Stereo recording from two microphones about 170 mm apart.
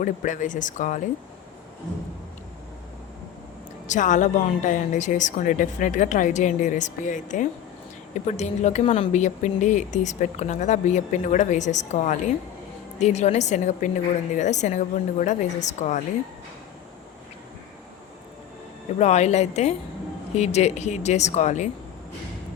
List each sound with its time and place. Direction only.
0.0 s a woman's voice: 50° left (ahead or behind)
3.8 s a woman's voice: 45° left (ahead or behind)
18.9 s speech: 40° left (ahead or behind)